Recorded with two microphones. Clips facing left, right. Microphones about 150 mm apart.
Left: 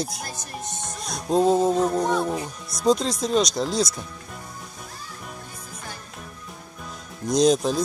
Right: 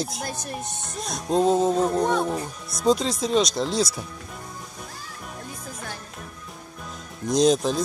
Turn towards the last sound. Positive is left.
turn(degrees=0)  # may be behind; listen again after turning